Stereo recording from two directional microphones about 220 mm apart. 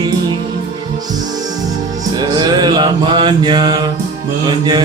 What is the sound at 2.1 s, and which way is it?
Music, 20° right (ahead or behind).